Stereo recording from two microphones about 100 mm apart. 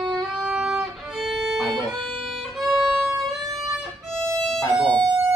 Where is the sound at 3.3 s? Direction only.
Centre (ahead or behind).